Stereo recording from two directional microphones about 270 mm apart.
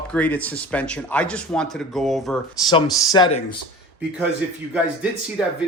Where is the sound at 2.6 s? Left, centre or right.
Centre.